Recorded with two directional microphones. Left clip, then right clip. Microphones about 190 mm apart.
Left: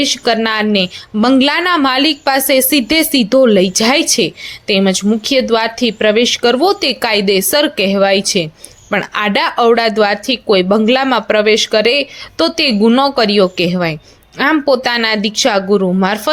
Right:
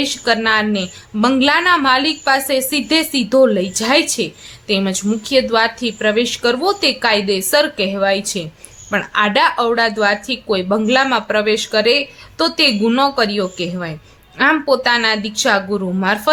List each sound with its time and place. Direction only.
0.0 s a woman's voice: 30° left (ahead or behind)